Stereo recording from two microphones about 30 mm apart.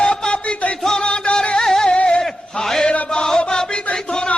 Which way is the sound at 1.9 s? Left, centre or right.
Left.